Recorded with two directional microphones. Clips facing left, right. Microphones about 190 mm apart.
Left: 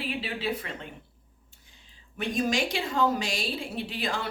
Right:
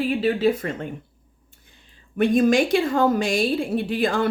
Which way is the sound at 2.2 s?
55° right (ahead or behind).